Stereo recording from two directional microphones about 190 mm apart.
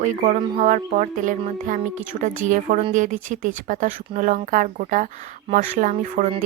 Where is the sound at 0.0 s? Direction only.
40° right (ahead or behind).